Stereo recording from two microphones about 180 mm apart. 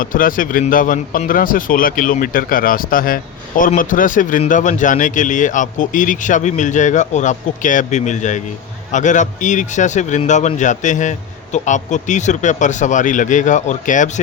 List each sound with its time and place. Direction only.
0.0 s speech: 50° left (ahead or behind)